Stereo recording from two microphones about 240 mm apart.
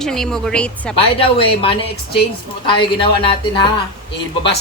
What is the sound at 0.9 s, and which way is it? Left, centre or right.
Speech, left.